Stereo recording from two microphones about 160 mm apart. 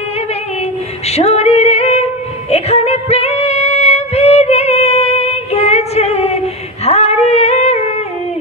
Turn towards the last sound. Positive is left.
turn(degrees=40)  # may be behind; listen again after turning